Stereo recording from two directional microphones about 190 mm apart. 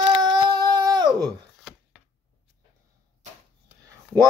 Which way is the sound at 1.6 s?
Centre (ahead or behind).